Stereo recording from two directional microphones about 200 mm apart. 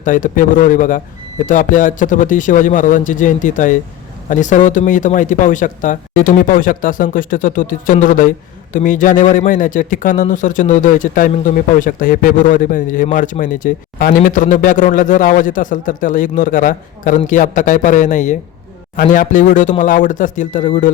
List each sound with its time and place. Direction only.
0.0 s speech: 40° left (ahead or behind)